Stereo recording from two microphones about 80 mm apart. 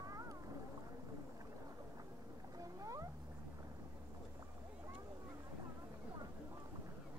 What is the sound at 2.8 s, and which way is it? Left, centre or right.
Cat, right.